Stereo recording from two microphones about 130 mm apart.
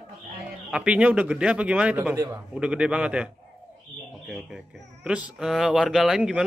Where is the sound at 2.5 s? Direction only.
10° right (ahead or behind).